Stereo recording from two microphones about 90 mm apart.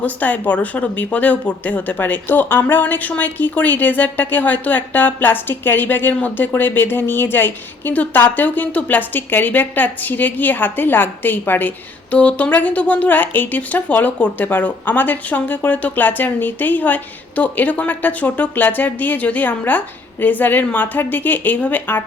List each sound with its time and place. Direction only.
0.0 s speech: 15° left (ahead or behind)